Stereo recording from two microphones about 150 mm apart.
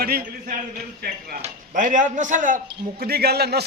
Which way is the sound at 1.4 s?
55° right (ahead or behind).